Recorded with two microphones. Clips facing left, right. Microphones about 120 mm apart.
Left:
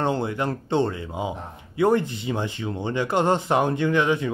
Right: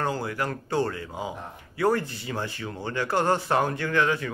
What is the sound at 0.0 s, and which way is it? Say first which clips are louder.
Speech: left 4 dB; 25° left (ahead or behind).